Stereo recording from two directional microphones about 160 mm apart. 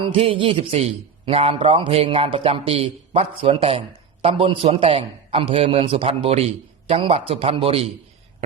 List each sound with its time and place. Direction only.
0.0 s a man's voice: 35° right (ahead or behind)